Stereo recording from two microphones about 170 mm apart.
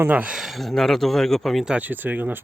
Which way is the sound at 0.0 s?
10° right (ahead or behind).